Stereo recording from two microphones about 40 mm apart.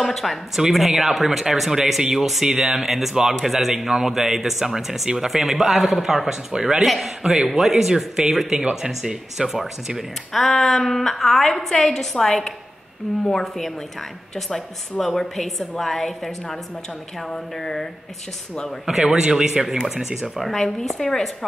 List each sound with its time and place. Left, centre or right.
0.0 s a woman's voice: centre
0.6 s a woman's voice: centre
8.6 s speech: right
9.5 s a man's voice: centre
10.5 s a woman's voice: centre
15.0 s a woman's voice: centre
18.9 s a man's voice: centre
20.3 s a woman's voice: centre